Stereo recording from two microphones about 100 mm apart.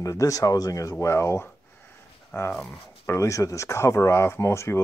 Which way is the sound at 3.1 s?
30° left (ahead or behind).